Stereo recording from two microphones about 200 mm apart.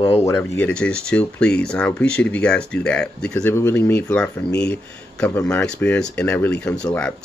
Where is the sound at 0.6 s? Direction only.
5° left (ahead or behind).